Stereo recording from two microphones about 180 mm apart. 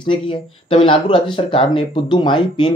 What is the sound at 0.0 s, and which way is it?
Speech, 25° left (ahead or behind).